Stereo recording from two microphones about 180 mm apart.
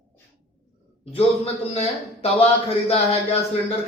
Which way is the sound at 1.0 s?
35° left (ahead or behind).